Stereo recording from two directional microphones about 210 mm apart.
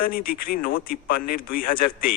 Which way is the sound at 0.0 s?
45° left (ahead or behind).